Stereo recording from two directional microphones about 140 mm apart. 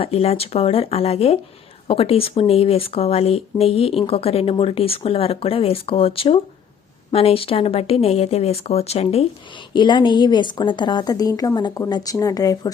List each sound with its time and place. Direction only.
0.0 s speech: 45° left (ahead or behind)
9.7 s a woman's voice: 35° left (ahead or behind)